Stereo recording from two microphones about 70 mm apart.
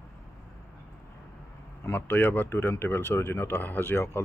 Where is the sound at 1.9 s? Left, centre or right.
Left.